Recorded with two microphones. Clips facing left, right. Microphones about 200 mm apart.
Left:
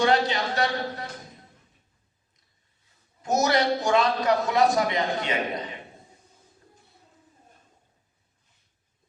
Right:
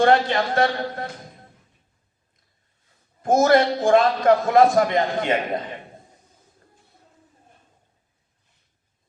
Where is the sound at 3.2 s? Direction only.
50° right (ahead or behind).